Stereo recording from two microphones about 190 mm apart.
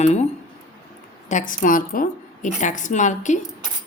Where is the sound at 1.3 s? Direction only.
40° left (ahead or behind).